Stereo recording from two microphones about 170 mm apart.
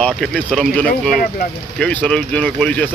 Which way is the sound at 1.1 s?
55° left (ahead or behind).